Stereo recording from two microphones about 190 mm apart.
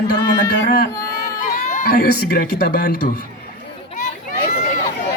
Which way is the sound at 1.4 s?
40° left (ahead or behind).